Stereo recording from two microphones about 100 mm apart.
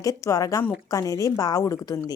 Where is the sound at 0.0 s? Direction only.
35° left (ahead or behind).